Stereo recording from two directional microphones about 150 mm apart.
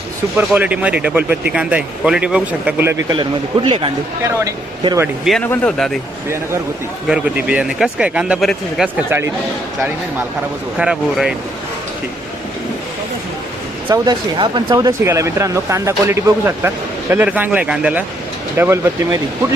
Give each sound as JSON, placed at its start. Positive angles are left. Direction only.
{"t": 0.3, "sound": "speech", "side_deg": -10}
{"t": 3.1, "sound": "speech", "side_deg": -30}
{"t": 4.2, "sound": "speech", "side_deg": -20}
{"t": 5.4, "sound": "speech", "side_deg": 10}
{"t": 7.1, "sound": "speech", "side_deg": -10}
{"t": 9.0, "sound": "speech", "side_deg": -15}
{"t": 10.8, "sound": "speech", "side_deg": -5}
{"t": 13.8, "sound": "speech", "side_deg": -25}
{"t": 14.3, "sound": "speech", "side_deg": -35}